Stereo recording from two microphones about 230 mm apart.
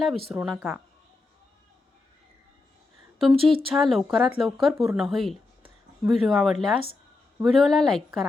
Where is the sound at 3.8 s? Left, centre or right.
Centre.